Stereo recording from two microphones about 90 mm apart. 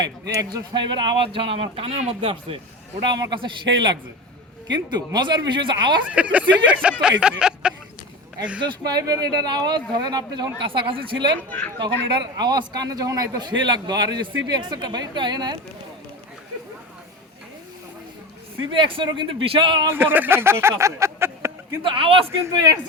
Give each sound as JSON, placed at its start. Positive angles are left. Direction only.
{"t": 0.3, "sound": "speech", "side_deg": -55}
{"t": 3.1, "sound": "speech", "side_deg": -60}
{"t": 6.1, "sound": "speech", "side_deg": -15}
{"t": 8.6, "sound": "speech", "side_deg": -45}
{"t": 10.7, "sound": "speech", "side_deg": -75}
{"t": 11.3, "sound": "speech", "side_deg": 20}
{"t": 11.8, "sound": "speech", "side_deg": -50}
{"t": 13.5, "sound": "speech", "side_deg": -55}
{"t": 18.7, "sound": "speech", "side_deg": -70}
{"t": 19.9, "sound": "speech", "side_deg": -25}
{"t": 21.8, "sound": "a man's voice", "side_deg": -80}
{"t": 22.5, "sound": "speech", "side_deg": -45}